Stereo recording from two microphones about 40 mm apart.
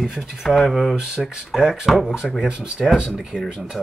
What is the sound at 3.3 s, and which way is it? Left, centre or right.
Speech, left.